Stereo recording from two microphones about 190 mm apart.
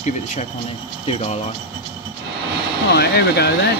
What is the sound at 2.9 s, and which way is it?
Speech, 60° left (ahead or behind).